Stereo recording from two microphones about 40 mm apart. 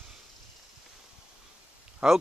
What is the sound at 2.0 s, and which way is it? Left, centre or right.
Speech, centre.